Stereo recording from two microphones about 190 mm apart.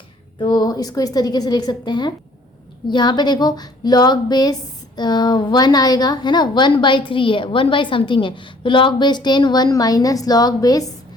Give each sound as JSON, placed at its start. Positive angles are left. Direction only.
{"t": 0.3, "sound": "a woman's voice", "side_deg": 25}